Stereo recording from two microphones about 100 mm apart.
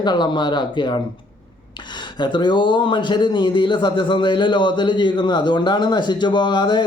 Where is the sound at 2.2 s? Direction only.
45° left (ahead or behind).